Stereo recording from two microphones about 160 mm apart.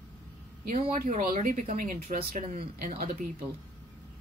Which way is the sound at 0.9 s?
60° right (ahead or behind).